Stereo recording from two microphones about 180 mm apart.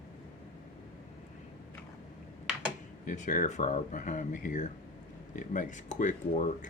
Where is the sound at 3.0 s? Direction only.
45° left (ahead or behind).